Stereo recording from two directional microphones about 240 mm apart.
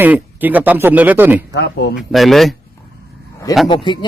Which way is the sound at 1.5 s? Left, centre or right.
Left.